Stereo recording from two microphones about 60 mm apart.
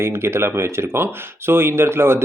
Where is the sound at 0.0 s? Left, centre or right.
Right.